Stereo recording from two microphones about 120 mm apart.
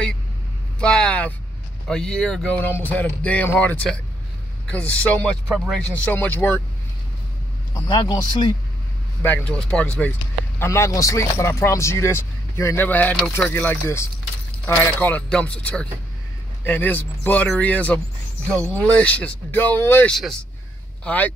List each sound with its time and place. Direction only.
0.7 s speech: 10° left (ahead or behind)
7.7 s speech: 35° left (ahead or behind)
9.2 s speech: 15° left (ahead or behind)
10.6 s speech: 25° left (ahead or behind)
20.1 s speech: centre (ahead or behind)
21.0 s speech: 10° left (ahead or behind)